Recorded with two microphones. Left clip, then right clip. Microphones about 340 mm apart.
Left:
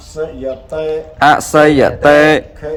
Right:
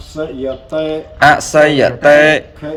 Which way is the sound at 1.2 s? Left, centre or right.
Centre.